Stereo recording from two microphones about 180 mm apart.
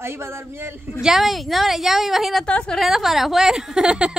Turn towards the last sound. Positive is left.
turn(degrees=-5)  # may be behind; listen again after turning